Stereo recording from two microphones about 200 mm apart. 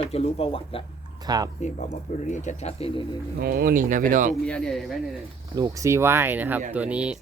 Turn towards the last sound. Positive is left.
turn(degrees=-5)  # may be behind; listen again after turning